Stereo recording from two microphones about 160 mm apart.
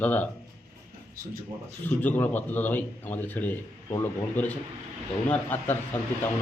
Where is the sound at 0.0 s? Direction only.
10° left (ahead or behind).